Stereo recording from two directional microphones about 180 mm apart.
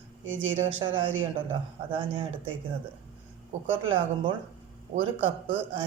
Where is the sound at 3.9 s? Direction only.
25° right (ahead or behind).